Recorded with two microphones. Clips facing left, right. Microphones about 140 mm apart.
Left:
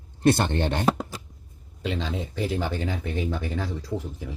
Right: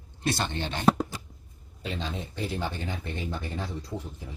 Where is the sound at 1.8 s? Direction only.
90° left.